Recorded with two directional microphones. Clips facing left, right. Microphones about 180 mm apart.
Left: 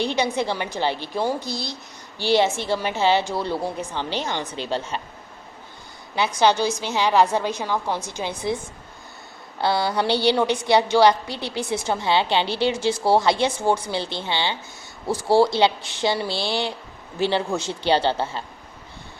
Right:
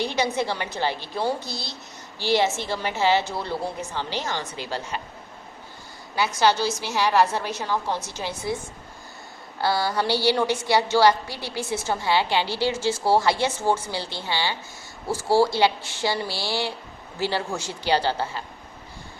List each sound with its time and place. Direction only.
0.0 s a woman's voice: 20° left (ahead or behind)
6.1 s a woman's voice: 20° left (ahead or behind)
9.6 s a woman's voice: 20° left (ahead or behind)